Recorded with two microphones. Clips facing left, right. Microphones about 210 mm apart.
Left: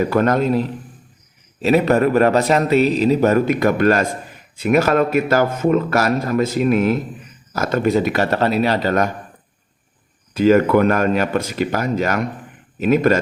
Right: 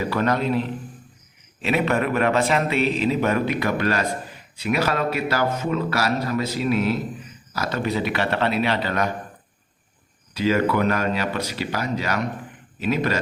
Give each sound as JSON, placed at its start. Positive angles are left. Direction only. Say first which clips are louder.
{"t": 0.0, "sound": "a man's voice", "louder": "left 6 dB", "side_deg": 50}
{"t": 10.3, "sound": "a man's voice", "louder": "left 7 dB", "side_deg": 50}